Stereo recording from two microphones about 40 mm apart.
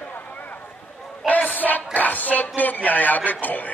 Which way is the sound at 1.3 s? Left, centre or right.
Left.